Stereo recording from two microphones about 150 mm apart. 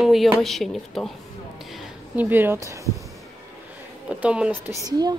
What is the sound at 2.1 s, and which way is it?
Speech, 10° right (ahead or behind).